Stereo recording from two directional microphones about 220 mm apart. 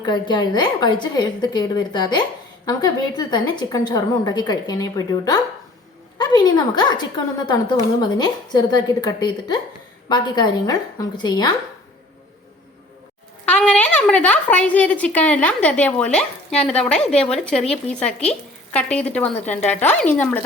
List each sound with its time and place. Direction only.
0.0 s a woman's voice: 20° left (ahead or behind)
13.4 s a woman's voice: 5° left (ahead or behind)